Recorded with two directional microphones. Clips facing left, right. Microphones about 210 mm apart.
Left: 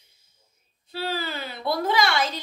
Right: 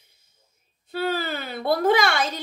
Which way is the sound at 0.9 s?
55° right (ahead or behind).